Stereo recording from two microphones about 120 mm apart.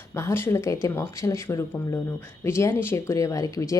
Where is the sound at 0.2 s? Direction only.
20° left (ahead or behind).